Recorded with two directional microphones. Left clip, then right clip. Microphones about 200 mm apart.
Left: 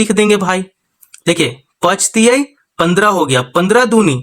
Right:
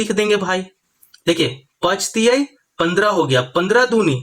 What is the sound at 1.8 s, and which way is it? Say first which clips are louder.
Speech: left 5 dB; 40° left (ahead or behind).